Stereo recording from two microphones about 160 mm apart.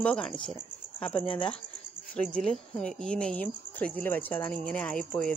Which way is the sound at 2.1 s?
5° left (ahead or behind).